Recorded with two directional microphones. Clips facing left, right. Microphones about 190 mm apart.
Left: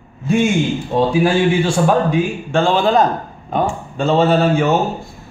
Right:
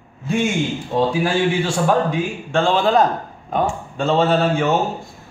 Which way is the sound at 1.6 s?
15° left (ahead or behind).